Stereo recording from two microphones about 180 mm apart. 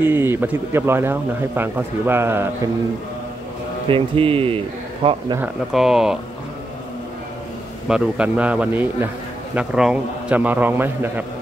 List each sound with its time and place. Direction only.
0.0 s speech: 10° right (ahead or behind)
3.9 s speech: 30° right (ahead or behind)
5.4 s speech: centre (ahead or behind)
7.9 s speech: 5° right (ahead or behind)